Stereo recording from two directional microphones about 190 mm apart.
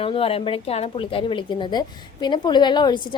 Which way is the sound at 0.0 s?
30° left (ahead or behind).